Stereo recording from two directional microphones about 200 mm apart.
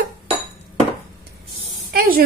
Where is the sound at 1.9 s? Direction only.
50° right (ahead or behind).